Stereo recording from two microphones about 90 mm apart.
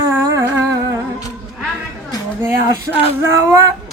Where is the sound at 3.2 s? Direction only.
30° right (ahead or behind).